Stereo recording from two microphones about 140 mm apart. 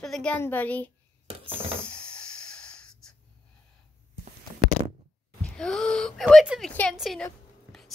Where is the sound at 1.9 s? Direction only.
5° left (ahead or behind).